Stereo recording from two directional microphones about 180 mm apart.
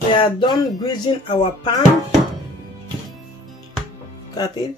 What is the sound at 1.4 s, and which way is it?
Speech, 40° left (ahead or behind).